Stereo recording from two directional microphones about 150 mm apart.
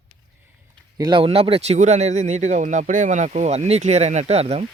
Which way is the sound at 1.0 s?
35° right (ahead or behind).